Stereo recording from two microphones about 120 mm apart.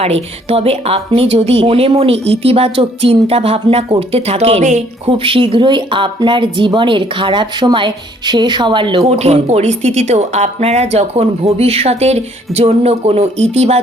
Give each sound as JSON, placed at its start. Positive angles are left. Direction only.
{"t": 0.0, "sound": "speech", "side_deg": -55}
{"t": 9.0, "sound": "speech", "side_deg": -60}